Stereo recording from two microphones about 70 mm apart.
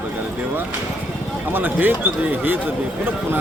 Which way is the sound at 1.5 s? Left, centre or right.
Right.